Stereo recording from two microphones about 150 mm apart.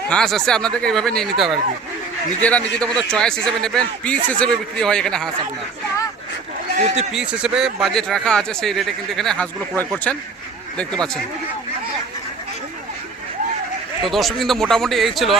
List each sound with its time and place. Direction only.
0.1 s speech: 5° left (ahead or behind)
6.7 s speech: 45° right (ahead or behind)
7.1 s speech: 5° right (ahead or behind)
14.0 s speech: centre (ahead or behind)